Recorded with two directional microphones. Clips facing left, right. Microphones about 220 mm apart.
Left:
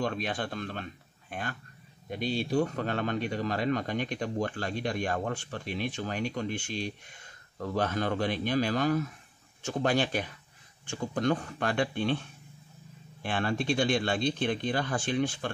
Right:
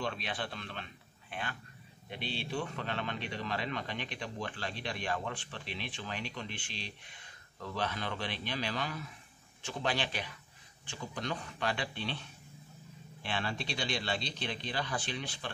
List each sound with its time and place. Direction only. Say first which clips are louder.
0.0 s speech: left 6 dB; 45° left (ahead or behind)